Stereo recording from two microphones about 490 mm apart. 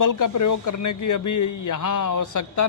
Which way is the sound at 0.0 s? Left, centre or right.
Left.